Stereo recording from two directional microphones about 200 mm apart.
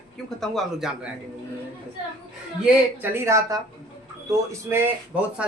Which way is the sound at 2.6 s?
10° right (ahead or behind).